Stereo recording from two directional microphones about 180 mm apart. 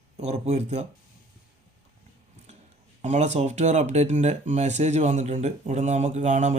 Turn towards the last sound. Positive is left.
turn(degrees=-40)  # may be behind; listen again after turning